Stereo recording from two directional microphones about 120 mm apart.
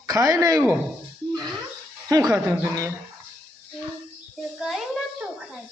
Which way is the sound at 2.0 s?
30° right (ahead or behind).